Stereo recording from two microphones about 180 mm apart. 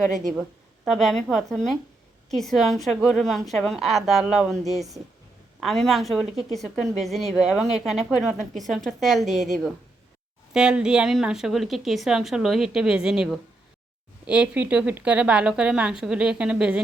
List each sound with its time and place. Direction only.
0.1 s a woman's voice: 45° right (ahead or behind)
0.9 s a woman's voice: centre (ahead or behind)